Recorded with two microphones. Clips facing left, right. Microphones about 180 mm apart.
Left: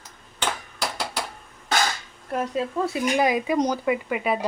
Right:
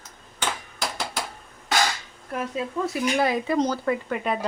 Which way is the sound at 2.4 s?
30° left (ahead or behind).